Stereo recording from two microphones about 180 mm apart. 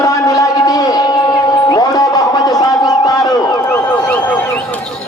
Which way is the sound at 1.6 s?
20° left (ahead or behind).